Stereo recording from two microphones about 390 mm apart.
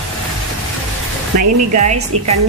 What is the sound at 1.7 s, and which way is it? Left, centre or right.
Speech, centre.